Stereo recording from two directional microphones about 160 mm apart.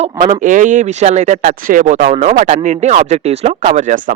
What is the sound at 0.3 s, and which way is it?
Speech, 55° right (ahead or behind).